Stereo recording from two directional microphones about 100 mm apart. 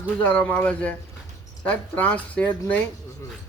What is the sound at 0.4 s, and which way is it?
Speech, 15° left (ahead or behind).